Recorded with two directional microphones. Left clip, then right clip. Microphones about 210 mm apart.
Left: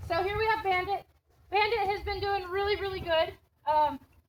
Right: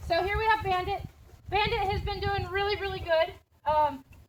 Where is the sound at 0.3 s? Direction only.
30° right (ahead or behind).